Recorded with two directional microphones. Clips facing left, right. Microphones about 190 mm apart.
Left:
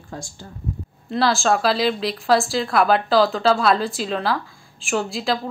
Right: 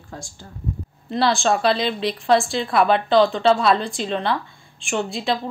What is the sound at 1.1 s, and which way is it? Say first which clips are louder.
Speech: even; centre (ahead or behind).